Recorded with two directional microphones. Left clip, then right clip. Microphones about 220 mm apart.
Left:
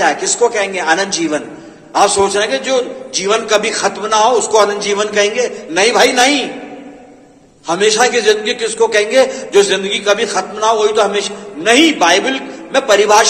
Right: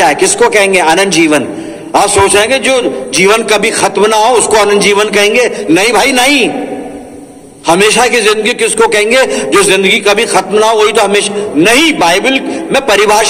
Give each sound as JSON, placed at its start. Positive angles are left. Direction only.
{"t": 0.0, "sound": "a man's voice", "side_deg": -50}
{"t": 7.6, "sound": "a man's voice", "side_deg": -50}